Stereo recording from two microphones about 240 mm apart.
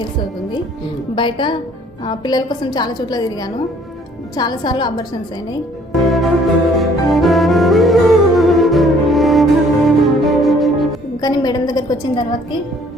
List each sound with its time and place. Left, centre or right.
1.1 s a woman's voice: centre
5.9 s music: centre
11.2 s a woman's voice: centre